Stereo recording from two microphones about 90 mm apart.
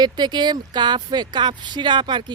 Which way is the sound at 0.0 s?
55° right (ahead or behind).